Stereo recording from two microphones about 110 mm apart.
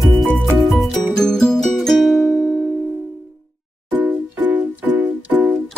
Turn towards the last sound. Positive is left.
turn(degrees=-15)  # may be behind; listen again after turning